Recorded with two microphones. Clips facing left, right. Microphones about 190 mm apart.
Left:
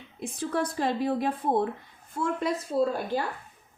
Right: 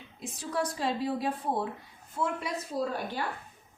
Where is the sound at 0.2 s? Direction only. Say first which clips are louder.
Left 4 dB; 55° left (ahead or behind).